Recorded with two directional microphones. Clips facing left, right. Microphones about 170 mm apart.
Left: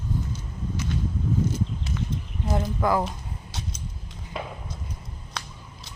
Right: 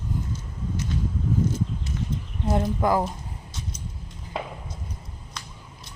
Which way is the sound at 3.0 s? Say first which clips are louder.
Right 1 dB; 80° left.